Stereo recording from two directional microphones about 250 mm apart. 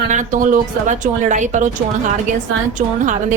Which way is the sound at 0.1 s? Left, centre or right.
Right.